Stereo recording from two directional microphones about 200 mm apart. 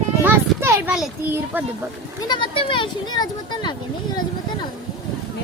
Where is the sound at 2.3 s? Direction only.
25° left (ahead or behind).